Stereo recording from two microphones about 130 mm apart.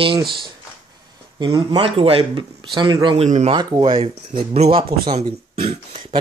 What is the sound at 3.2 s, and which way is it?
Speech, 55° right (ahead or behind).